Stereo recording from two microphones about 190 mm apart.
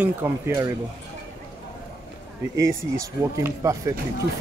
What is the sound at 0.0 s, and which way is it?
Speech, 10° right (ahead or behind).